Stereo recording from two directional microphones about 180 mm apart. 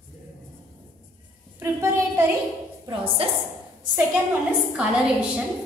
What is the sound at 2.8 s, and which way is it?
Speech, 30° right (ahead or behind).